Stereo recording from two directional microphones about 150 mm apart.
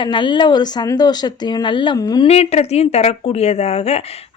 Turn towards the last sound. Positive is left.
turn(degrees=45)  # may be behind; listen again after turning